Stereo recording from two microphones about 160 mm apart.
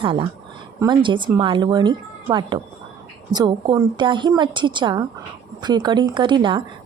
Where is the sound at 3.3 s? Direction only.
25° right (ahead or behind).